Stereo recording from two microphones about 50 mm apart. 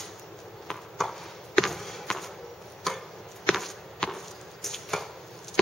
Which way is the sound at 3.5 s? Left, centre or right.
Centre.